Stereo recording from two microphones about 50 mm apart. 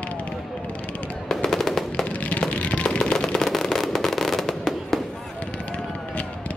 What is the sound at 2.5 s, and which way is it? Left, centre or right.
Music, left.